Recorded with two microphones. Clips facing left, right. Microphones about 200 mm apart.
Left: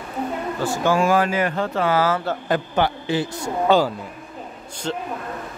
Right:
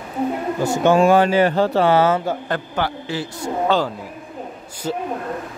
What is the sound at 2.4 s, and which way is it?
A man's voice, 15° left (ahead or behind).